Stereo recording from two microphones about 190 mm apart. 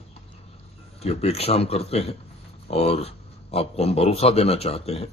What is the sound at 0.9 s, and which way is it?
A man's voice, 30° left (ahead or behind).